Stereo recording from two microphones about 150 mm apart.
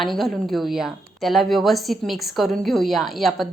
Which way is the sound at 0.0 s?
Centre (ahead or behind).